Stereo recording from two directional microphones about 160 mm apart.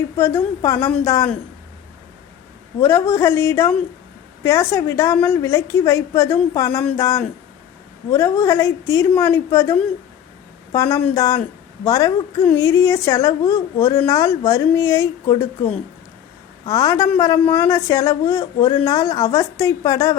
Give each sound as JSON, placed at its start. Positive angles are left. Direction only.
{"t": 0.2, "sound": "a woman's voice", "side_deg": 15}
{"t": 2.8, "sound": "a woman's voice", "side_deg": 20}